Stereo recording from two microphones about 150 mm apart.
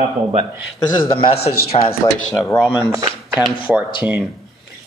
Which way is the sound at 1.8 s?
70° left (ahead or behind).